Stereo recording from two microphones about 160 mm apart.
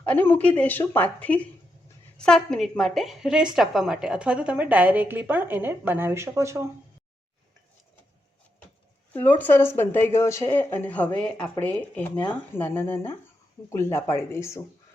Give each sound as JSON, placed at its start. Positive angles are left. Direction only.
{"t": 0.0, "sound": "a woman's voice", "side_deg": 10}
{"t": 9.1, "sound": "a woman's voice", "side_deg": 10}